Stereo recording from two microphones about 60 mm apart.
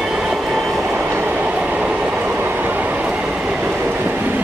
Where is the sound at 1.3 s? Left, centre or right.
Right.